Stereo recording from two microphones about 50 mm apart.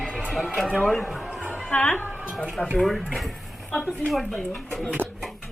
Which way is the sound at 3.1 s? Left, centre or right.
Centre.